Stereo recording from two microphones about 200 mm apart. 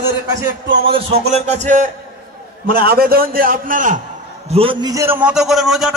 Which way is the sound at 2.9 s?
50° right (ahead or behind).